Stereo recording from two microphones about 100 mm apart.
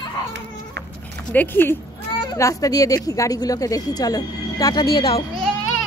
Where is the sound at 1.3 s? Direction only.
20° left (ahead or behind).